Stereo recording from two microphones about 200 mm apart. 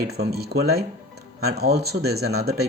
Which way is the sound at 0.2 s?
50° right (ahead or behind).